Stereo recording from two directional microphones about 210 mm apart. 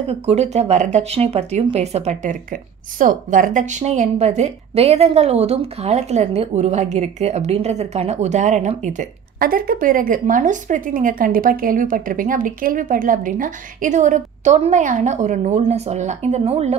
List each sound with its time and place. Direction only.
0.0 s speech: 30° right (ahead or behind)